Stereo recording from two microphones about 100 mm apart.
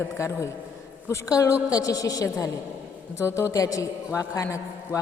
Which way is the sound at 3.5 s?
35° left (ahead or behind).